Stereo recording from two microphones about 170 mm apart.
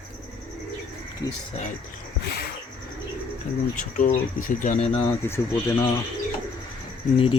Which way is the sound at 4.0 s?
60° left (ahead or behind).